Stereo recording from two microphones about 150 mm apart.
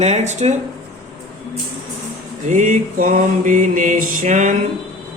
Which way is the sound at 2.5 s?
55° right (ahead or behind).